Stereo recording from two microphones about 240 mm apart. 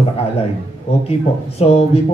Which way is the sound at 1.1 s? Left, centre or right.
Left.